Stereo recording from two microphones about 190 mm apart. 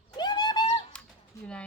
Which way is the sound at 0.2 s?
20° left (ahead or behind).